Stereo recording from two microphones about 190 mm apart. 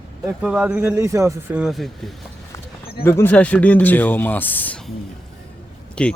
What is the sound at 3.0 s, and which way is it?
Speech, 10° left (ahead or behind).